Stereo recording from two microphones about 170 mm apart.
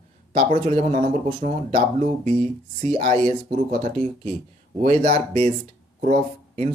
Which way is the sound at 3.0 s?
40° right (ahead or behind).